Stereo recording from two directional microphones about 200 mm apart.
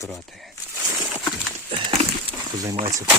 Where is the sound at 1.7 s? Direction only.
30° right (ahead or behind).